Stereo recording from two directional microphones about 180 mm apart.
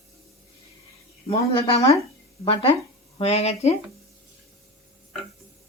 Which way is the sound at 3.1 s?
35° left (ahead or behind).